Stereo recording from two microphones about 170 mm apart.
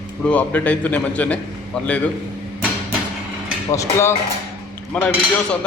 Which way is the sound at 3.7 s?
15° left (ahead or behind).